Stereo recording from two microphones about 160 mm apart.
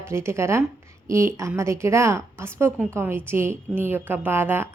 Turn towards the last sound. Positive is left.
turn(degrees=-15)  # may be behind; listen again after turning